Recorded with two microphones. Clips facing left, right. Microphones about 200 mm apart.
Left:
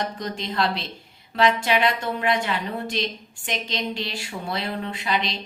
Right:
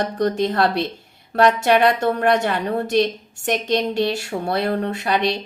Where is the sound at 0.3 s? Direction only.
45° right (ahead or behind).